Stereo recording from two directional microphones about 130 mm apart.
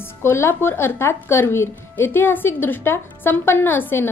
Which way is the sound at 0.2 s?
20° left (ahead or behind).